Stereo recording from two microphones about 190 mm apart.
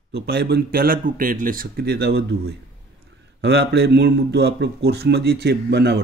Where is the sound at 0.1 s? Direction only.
60° right (ahead or behind).